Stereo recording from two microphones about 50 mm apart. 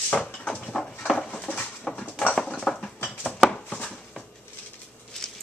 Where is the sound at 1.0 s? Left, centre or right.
Centre.